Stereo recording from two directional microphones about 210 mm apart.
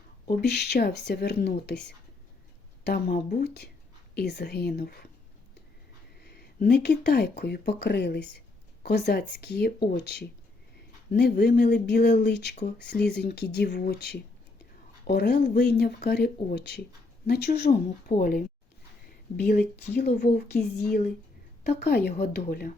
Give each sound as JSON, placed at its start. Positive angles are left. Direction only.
{"t": 0.3, "sound": "speech", "side_deg": 50}
{"t": 6.2, "sound": "a sound", "side_deg": 50}
{"t": 6.7, "sound": "speech", "side_deg": 55}